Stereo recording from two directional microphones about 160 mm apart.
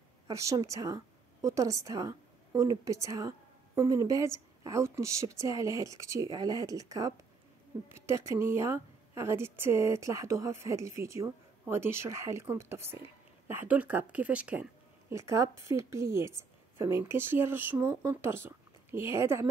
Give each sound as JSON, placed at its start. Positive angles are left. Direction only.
{"t": 0.3, "sound": "a woman's voice", "side_deg": -20}